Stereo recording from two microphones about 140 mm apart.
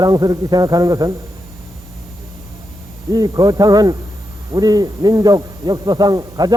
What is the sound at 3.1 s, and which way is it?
Speech, 25° right (ahead or behind).